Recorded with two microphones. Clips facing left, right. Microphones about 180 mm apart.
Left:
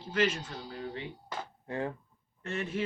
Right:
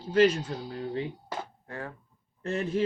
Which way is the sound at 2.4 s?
35° right (ahead or behind).